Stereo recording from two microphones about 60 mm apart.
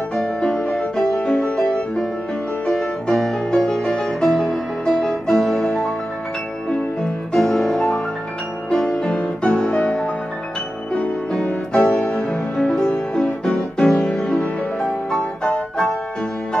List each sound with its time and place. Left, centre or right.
0.2 s music: centre
0.9 s music: centre
7.0 s music: centre